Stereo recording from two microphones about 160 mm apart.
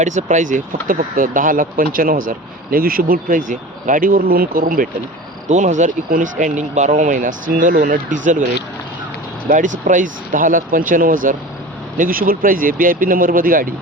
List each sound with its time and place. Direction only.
0.0 s speech: 50° right (ahead or behind)
5.5 s speech: 50° right (ahead or behind)
9.5 s speech: 55° right (ahead or behind)